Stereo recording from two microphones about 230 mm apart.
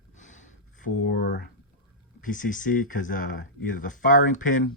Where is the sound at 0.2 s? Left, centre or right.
Left.